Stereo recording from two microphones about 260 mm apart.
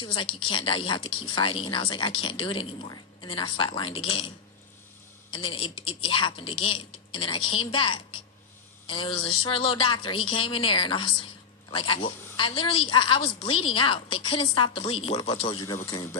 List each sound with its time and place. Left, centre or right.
0.0 s speech: centre
5.3 s speech: centre